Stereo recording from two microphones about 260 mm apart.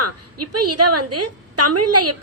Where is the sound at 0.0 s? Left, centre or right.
Right.